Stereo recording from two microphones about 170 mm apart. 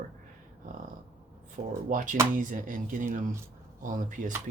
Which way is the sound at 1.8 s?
50° right (ahead or behind).